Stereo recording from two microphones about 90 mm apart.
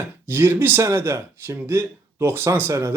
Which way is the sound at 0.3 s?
25° right (ahead or behind).